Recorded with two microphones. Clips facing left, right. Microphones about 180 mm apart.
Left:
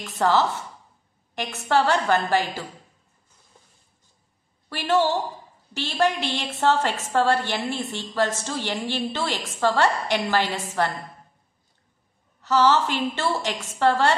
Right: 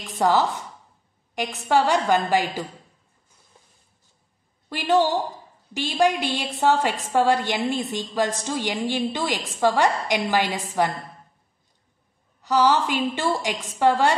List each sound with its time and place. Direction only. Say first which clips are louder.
0.2 s a woman's voice: right 1 dB; 15° right (ahead or behind)
4.6 s a woman's voice: right 1 dB; 15° right (ahead or behind)
12.4 s a woman's voice: even; 15° right (ahead or behind)